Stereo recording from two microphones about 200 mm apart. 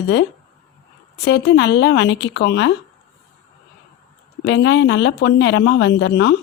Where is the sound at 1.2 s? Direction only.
60° left (ahead or behind).